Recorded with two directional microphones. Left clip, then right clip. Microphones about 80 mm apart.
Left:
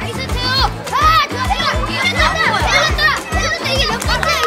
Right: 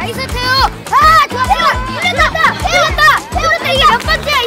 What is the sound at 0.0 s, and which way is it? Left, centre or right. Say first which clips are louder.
Children playing: right 4 dB; right.